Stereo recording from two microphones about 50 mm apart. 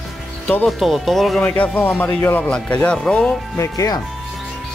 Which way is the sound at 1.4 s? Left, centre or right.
Left.